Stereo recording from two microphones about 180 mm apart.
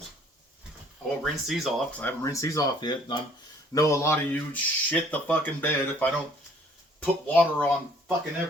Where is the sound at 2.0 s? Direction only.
15° left (ahead or behind).